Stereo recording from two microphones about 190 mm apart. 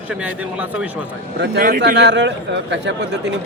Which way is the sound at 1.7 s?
55° right (ahead or behind).